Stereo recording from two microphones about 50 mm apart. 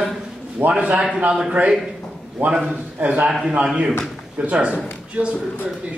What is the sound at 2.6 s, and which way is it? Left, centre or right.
Speech, right.